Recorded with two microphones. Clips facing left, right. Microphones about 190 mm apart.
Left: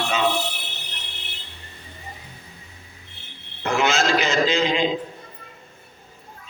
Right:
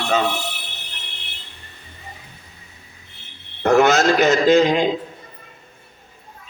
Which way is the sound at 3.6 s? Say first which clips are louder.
Right 7 dB; 45° right (ahead or behind).